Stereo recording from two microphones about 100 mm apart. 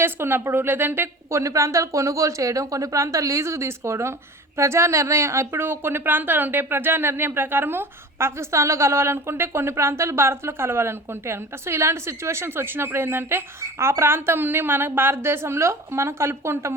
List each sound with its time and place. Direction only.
0.0 s a woman's voice: 25° right (ahead or behind)